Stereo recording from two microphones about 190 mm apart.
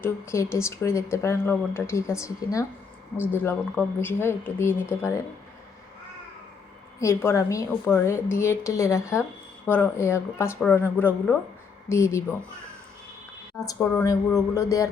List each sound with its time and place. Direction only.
0.0 s speech: 15° left (ahead or behind)
7.0 s speech: 15° left (ahead or behind)
13.7 s speech: 15° left (ahead or behind)